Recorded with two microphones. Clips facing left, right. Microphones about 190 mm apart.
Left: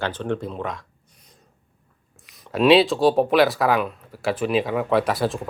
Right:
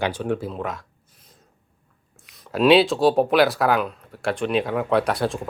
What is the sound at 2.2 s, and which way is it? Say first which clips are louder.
Speech: even; centre (ahead or behind).